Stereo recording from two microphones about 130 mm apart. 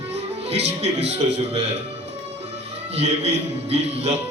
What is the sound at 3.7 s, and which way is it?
Speech, 55° right (ahead or behind).